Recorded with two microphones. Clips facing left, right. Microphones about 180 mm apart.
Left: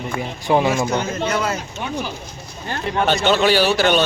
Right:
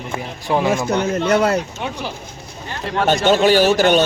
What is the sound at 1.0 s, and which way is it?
Speech, 60° right (ahead or behind).